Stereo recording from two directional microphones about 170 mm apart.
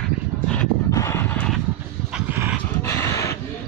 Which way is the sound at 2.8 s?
15° left (ahead or behind).